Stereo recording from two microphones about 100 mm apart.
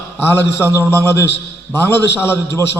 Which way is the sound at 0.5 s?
25° left (ahead or behind).